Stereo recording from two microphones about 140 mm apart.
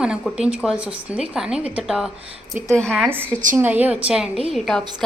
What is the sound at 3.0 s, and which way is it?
A woman's voice, 15° right (ahead or behind).